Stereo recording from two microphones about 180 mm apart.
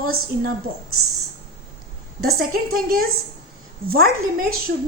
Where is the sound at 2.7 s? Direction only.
55° right (ahead or behind).